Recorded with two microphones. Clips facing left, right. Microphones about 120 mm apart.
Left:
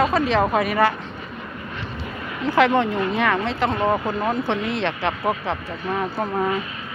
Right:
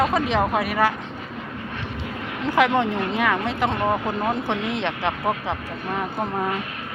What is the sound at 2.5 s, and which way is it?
Speech, 15° right (ahead or behind).